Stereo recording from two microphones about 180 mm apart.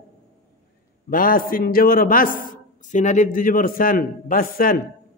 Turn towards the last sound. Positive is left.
turn(degrees=50)  # may be behind; listen again after turning